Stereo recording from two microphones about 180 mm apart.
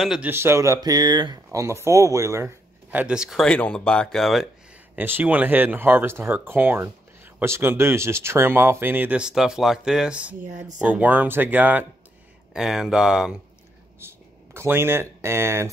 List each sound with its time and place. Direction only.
0.0 s speech: 5° right (ahead or behind)
0.3 s speech: 15° right (ahead or behind)
4.9 s speech: 10° right (ahead or behind)
10.4 s speech: 45° right (ahead or behind)
10.8 s speech: 10° right (ahead or behind)
14.0 s a sound: 15° right (ahead or behind)
14.5 s speech: 15° right (ahead or behind)